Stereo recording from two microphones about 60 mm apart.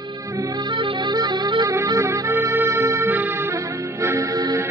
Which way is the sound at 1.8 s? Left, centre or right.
Right.